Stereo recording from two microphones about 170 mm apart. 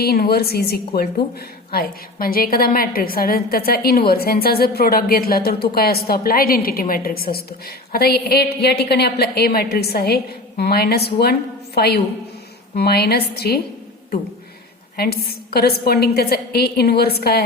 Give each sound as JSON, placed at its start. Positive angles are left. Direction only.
{"t": 0.0, "sound": "a woman's voice", "side_deg": 65}
{"t": 14.9, "sound": "a woman's voice", "side_deg": 65}